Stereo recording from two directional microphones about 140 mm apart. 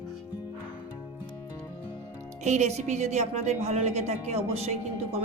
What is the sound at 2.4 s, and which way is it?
A woman's voice, 55° right (ahead or behind).